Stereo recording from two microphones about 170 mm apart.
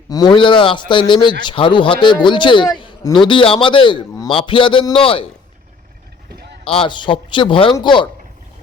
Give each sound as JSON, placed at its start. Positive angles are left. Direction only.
{"t": 0.1, "sound": "a man's voice", "side_deg": 25}
{"t": 6.7, "sound": "a man's voice", "side_deg": 30}